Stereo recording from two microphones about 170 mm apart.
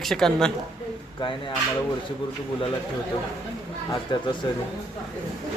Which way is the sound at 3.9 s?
25° left (ahead or behind).